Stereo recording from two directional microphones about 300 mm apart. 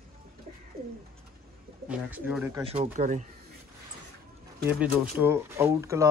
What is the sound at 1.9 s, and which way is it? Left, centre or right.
Speech, centre.